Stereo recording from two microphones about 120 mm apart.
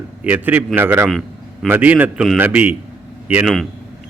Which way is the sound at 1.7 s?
15° right (ahead or behind).